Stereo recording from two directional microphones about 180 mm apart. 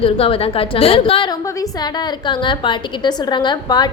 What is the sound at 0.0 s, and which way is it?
A woman's voice, 30° left (ahead or behind).